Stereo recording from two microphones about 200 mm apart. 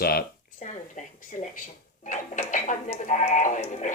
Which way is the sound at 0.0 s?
50° left (ahead or behind).